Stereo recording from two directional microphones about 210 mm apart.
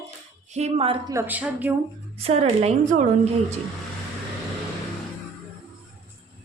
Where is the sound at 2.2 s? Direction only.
30° right (ahead or behind).